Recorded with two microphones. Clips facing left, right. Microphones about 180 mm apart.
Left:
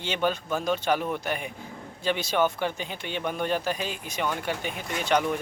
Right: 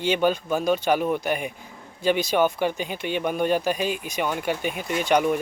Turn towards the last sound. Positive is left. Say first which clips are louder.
# right 4 dB
turn(degrees=-15)  # may be behind; listen again after turning